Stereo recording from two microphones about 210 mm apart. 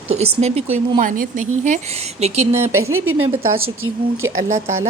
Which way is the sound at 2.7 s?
80° right.